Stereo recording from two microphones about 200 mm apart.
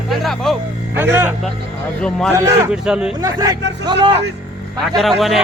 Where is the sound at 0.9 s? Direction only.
10° right (ahead or behind).